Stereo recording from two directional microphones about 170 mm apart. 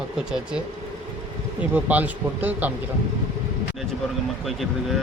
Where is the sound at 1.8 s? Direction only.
10° right (ahead or behind).